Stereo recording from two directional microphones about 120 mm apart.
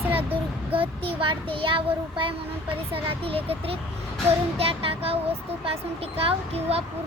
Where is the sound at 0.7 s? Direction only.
50° right (ahead or behind).